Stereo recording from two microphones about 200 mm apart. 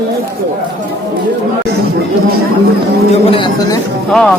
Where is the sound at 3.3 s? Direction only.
25° left (ahead or behind).